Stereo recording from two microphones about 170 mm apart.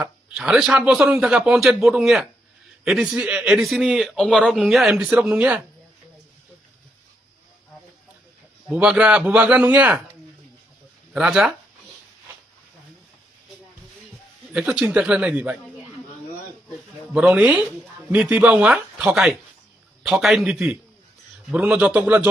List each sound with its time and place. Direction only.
0.0 s a man's voice: 5° right (ahead or behind)
8.7 s a man's voice: 5° right (ahead or behind)
11.1 s a man's voice: 5° right (ahead or behind)
14.5 s a man's voice: 5° right (ahead or behind)
17.2 s a man's voice: 5° right (ahead or behind)